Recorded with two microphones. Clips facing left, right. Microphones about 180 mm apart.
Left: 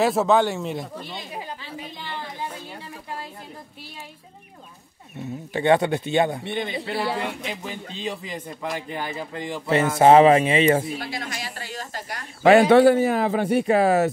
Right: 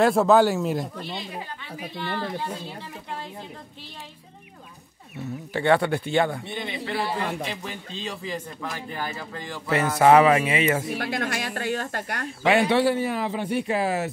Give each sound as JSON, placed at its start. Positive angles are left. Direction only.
{"t": 0.0, "sound": "speech", "side_deg": 0}
{"t": 5.1, "sound": "a man's voice", "side_deg": 20}
{"t": 6.4, "sound": "a man's voice", "side_deg": 60}
{"t": 7.6, "sound": "a man's voice", "side_deg": 20}
{"t": 11.0, "sound": "speech", "side_deg": -60}
{"t": 12.4, "sound": "a man's voice", "side_deg": 45}